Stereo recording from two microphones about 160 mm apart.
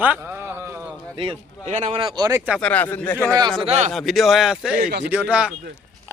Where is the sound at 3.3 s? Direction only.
25° right (ahead or behind).